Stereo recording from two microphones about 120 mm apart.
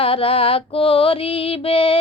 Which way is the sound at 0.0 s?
50° left (ahead or behind).